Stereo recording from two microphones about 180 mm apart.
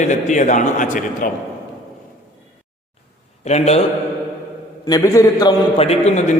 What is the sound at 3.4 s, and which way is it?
Speech, 35° left (ahead or behind).